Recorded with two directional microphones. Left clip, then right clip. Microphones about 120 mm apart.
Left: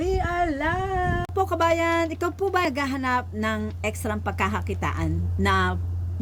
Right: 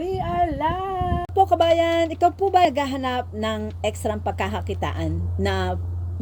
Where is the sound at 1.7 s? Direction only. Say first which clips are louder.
Right 3 dB; 30° left (ahead or behind).